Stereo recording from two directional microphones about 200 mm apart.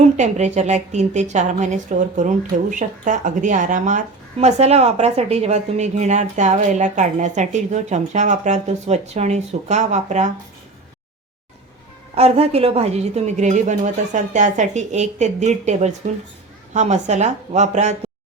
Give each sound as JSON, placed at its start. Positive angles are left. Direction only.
{"t": 0.2, "sound": "a woman's voice", "side_deg": -35}
{"t": 12.1, "sound": "a woman's voice", "side_deg": -30}